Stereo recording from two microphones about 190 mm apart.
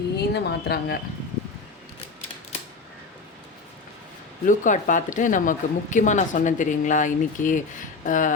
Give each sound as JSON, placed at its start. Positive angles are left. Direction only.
{"t": 0.2, "sound": "speech", "side_deg": 60}
{"t": 4.4, "sound": "speech", "side_deg": 40}
{"t": 8.0, "sound": "a sound", "side_deg": 45}